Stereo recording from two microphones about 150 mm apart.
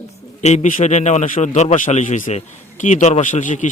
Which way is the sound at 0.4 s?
55° left (ahead or behind).